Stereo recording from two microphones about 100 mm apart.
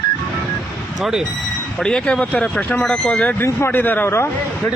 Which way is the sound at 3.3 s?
25° left (ahead or behind).